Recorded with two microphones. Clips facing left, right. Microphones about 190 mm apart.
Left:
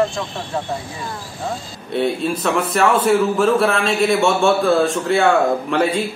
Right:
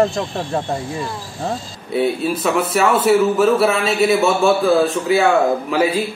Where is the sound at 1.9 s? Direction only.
5° right (ahead or behind).